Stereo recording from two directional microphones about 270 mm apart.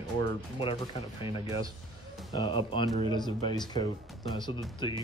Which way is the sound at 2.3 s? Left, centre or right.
Centre.